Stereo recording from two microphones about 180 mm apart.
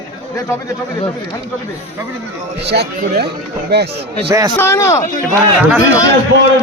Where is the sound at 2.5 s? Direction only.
65° right (ahead or behind).